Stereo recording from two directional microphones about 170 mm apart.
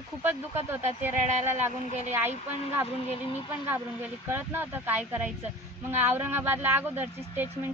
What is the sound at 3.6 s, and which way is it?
A woman's voice, 10° right (ahead or behind).